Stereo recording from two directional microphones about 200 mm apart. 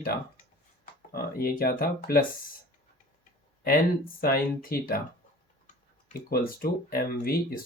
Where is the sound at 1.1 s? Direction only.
45° left (ahead or behind).